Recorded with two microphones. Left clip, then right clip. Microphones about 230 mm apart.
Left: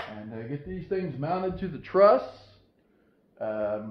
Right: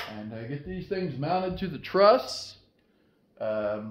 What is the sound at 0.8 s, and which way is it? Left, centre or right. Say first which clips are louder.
A man's voice: even; right.